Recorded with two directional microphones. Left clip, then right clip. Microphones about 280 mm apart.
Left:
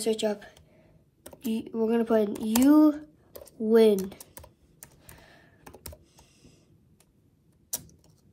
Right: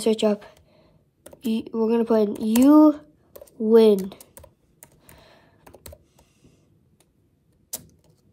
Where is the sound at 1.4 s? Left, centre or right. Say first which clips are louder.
Right 5 dB; centre.